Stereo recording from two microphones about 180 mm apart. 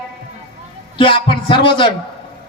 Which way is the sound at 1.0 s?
30° left (ahead or behind).